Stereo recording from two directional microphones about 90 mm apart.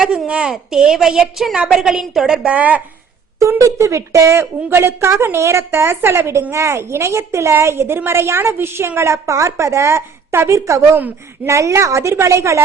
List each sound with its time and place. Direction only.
0.3 s a woman's voice: 10° right (ahead or behind)
3.6 s a woman's voice: 35° right (ahead or behind)